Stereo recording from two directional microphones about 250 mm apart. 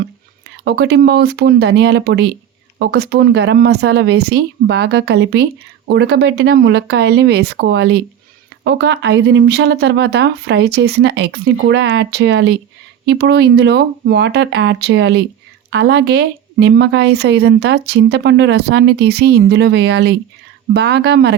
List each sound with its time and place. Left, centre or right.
0.6 s a woman's voice: right